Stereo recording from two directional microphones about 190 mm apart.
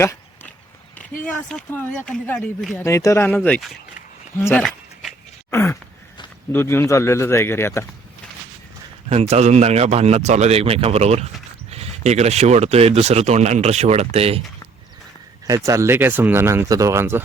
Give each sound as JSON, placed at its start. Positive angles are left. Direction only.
{"t": 0.0, "sound": "a sound", "side_deg": 15}
{"t": 1.2, "sound": "speech", "side_deg": 5}
{"t": 2.8, "sound": "a man's voice", "side_deg": 15}
{"t": 4.4, "sound": "a sound", "side_deg": 5}
{"t": 6.5, "sound": "a man's voice", "side_deg": 10}
{"t": 9.0, "sound": "speech", "side_deg": -35}
{"t": 15.4, "sound": "speech", "side_deg": -15}